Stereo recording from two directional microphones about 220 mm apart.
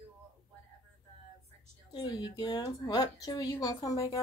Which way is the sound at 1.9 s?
20° left (ahead or behind).